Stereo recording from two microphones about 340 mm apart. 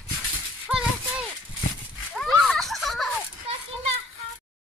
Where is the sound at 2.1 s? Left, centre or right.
Centre.